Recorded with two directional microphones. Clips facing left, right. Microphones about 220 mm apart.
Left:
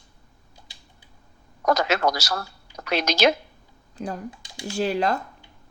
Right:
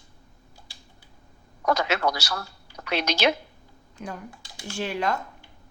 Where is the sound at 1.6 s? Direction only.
40° left (ahead or behind).